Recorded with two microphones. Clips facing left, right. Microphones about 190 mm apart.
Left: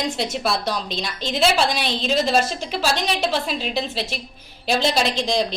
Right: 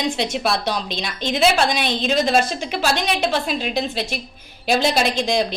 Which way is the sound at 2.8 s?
55° right (ahead or behind).